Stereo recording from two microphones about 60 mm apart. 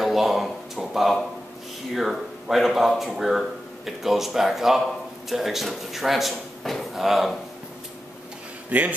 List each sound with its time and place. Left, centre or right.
0.0 s a sound: centre
2.0 s speech: centre
8.6 s speech: right